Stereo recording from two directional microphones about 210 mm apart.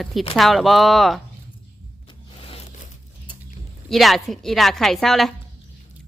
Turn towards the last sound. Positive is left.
turn(degrees=0)  # may be behind; listen again after turning